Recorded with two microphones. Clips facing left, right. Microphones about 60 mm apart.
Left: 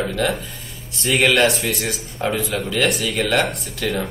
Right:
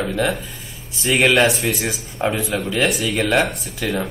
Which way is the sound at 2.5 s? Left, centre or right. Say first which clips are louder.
Right 1 dB; centre.